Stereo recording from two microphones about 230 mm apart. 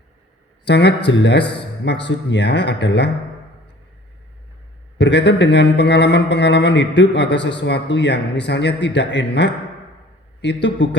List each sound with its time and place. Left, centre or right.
0.6 s speech: left
4.9 s speech: left